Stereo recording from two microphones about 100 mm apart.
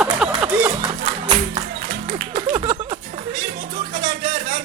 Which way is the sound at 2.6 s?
65° right (ahead or behind).